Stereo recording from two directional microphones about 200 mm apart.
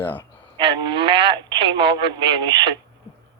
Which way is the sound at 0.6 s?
25° right (ahead or behind).